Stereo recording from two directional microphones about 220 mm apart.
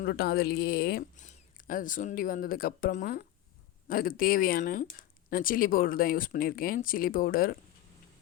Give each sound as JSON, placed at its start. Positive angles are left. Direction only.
{"t": 0.0, "sound": "speech", "side_deg": 45}